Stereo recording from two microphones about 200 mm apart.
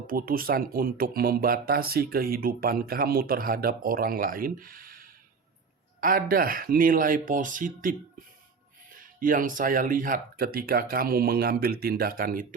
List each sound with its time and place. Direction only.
0.1 s speech: 45° right (ahead or behind)